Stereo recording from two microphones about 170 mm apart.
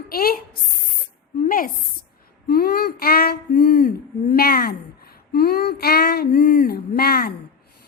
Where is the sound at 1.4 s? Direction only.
55° left (ahead or behind).